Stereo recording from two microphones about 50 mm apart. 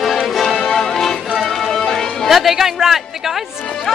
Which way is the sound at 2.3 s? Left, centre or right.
Centre.